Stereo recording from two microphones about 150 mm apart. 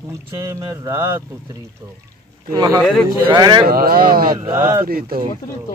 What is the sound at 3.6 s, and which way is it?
Speech, 80° right.